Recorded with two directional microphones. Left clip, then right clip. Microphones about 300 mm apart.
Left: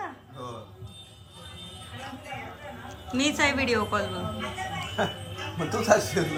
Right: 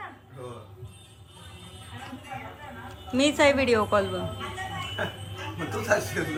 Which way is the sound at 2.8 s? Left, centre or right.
Centre.